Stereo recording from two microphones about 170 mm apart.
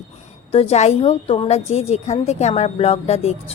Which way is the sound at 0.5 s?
35° left (ahead or behind).